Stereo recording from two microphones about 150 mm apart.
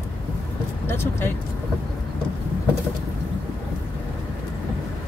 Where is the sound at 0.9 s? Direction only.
15° left (ahead or behind).